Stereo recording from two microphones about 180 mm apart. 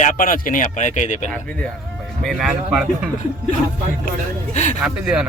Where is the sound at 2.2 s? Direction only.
Centre (ahead or behind).